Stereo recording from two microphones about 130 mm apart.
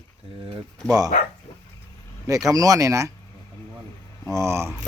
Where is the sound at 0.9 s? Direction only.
30° right (ahead or behind).